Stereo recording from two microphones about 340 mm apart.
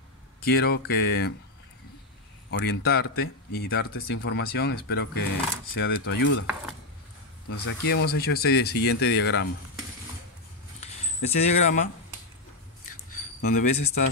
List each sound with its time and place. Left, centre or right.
0.4 s speech: left
2.6 s speech: left
7.4 s speech: left
10.8 s a sound: centre
13.4 s speech: left